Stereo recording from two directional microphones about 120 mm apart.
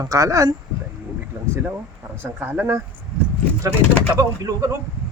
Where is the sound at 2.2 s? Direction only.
15° right (ahead or behind).